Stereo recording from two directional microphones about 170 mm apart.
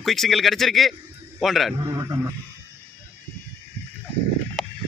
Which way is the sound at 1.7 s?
20° right (ahead or behind).